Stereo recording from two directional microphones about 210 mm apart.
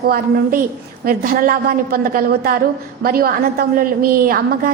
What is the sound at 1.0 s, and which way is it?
A woman's voice, 40° right (ahead or behind).